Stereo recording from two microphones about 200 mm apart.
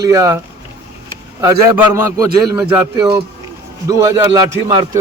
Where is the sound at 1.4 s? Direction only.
15° right (ahead or behind).